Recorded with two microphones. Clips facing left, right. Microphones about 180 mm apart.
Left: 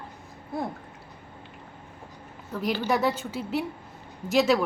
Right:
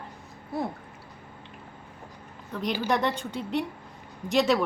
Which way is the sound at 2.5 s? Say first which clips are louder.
Left 1 dB; 5° left (ahead or behind).